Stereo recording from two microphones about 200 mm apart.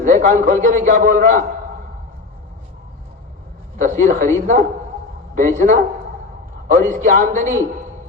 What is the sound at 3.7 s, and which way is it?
Speech, 40° right (ahead or behind).